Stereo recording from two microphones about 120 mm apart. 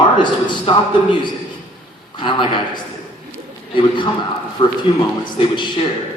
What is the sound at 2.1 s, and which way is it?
Speech, 40° left (ahead or behind).